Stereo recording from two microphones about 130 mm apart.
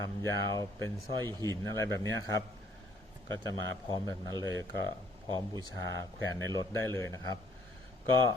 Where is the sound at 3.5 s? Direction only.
30° left (ahead or behind).